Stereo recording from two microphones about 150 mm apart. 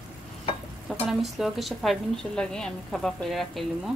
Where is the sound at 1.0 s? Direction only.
Centre (ahead or behind).